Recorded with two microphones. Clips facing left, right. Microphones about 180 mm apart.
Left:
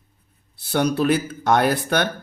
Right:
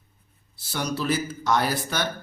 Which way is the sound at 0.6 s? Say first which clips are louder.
Left 9 dB; 60° left (ahead or behind).